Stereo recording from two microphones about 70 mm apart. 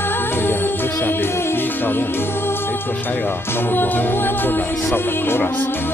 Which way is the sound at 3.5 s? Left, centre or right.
Left.